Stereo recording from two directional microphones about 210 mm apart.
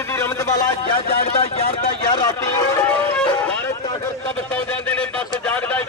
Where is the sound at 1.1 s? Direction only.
30° left (ahead or behind); by 3.3 s 10° left (ahead or behind).